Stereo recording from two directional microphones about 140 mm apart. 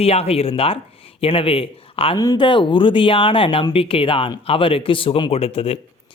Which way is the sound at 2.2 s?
30° left (ahead or behind).